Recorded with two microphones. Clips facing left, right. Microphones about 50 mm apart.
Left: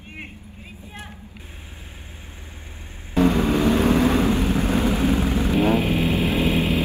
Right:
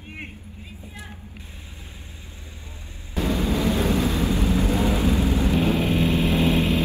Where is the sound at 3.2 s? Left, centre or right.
Left.